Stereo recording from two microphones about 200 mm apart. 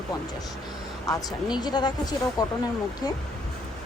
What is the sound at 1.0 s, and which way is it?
Speech, 20° left (ahead or behind).